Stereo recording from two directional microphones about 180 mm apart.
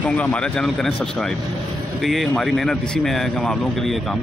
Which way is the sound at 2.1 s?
Centre (ahead or behind).